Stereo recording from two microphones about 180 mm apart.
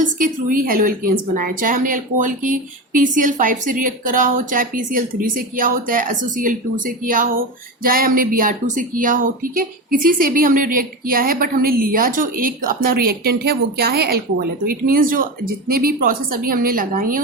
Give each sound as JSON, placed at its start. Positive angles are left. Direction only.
{"t": 0.0, "sound": "a woman's voice", "side_deg": -50}